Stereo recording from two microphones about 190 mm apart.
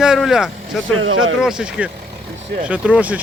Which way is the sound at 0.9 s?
90° right.